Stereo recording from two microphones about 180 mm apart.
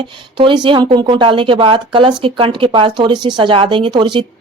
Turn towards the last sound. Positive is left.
turn(degrees=-25)  # may be behind; listen again after turning